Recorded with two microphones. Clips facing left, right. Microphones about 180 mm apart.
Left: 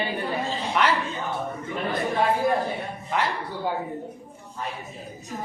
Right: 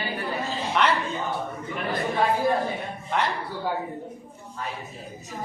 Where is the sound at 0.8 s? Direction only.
Centre (ahead or behind).